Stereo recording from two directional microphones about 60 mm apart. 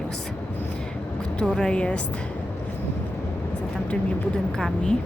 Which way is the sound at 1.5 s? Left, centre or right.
Centre.